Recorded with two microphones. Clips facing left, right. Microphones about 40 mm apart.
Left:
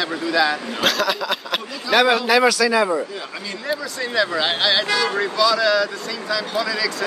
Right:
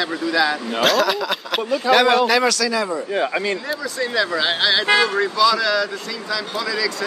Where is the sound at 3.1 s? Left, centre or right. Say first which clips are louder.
Right 10 dB; right.